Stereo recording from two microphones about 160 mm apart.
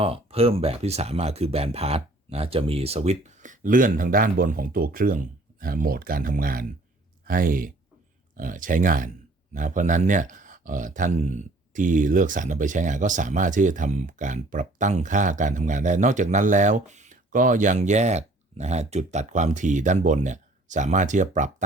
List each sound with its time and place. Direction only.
0.0 s speech: 35° right (ahead or behind)